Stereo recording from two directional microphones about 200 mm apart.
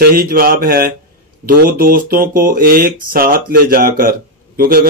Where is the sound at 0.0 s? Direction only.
45° right (ahead or behind).